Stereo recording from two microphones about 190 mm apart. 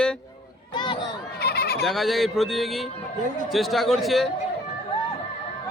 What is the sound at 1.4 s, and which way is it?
Sheep, 55° left (ahead or behind).